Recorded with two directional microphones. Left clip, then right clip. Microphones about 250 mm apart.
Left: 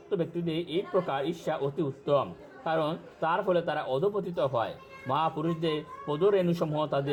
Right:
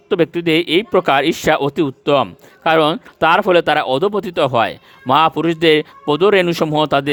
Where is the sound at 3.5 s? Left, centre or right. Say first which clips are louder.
Right 16 dB; right.